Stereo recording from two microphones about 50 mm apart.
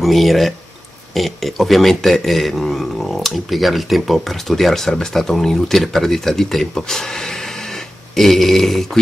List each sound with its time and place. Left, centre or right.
0.0 s a man's voice: centre